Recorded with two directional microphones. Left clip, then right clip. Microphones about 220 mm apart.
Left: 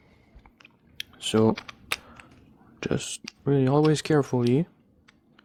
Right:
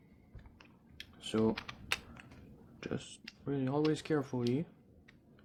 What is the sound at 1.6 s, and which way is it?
Typing, 15° left (ahead or behind).